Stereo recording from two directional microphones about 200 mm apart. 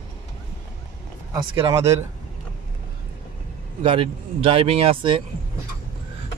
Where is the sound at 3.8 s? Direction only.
25° right (ahead or behind).